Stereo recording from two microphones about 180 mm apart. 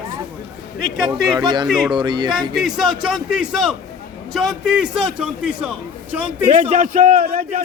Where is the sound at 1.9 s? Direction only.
25° right (ahead or behind).